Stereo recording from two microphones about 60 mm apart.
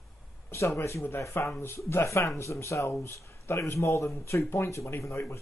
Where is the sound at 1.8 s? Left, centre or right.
Left.